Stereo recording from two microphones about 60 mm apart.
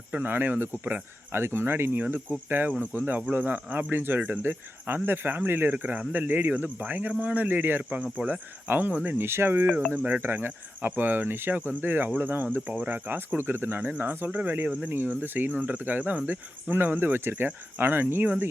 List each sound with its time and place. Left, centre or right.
0.1 s speech: right
5.7 s speech: right